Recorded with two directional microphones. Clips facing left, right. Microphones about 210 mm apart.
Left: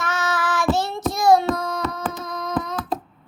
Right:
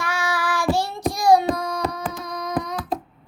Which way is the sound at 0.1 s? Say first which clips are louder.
Left 1 dB; 15° right (ahead or behind).